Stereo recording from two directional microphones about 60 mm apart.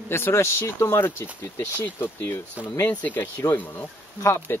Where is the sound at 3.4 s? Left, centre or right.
Left.